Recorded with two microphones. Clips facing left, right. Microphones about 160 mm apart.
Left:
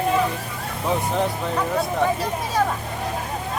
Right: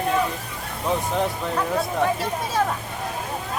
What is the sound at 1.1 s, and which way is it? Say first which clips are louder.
Speech: left 1 dB; centre (ahead or behind).